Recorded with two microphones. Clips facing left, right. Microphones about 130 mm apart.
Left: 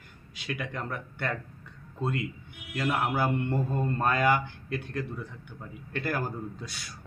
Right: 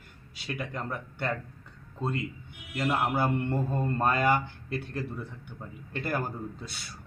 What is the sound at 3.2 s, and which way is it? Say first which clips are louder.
Mantra: even; 5° left (ahead or behind).